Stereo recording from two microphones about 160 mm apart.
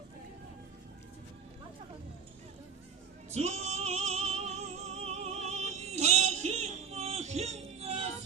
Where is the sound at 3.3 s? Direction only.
45° right (ahead or behind).